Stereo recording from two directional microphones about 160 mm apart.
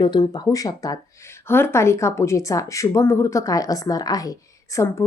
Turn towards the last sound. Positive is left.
turn(degrees=20)  # may be behind; listen again after turning